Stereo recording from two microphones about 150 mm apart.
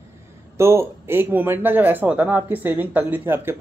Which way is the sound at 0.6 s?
15° right (ahead or behind).